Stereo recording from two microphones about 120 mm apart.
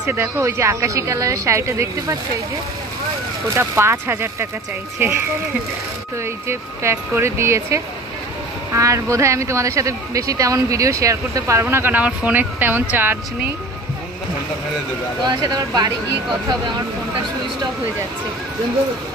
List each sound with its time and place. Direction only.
0.1 s speech: 20° right (ahead or behind)
3.5 s speech: 20° right (ahead or behind)
6.4 s speech: 20° right (ahead or behind)
15.2 s speech: 30° right (ahead or behind)